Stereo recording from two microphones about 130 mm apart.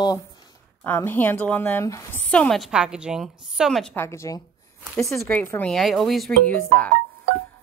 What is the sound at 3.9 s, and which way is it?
A woman's voice, 20° left (ahead or behind).